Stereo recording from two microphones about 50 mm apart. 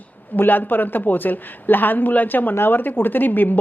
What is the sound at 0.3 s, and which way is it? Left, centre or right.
A man's voice, left.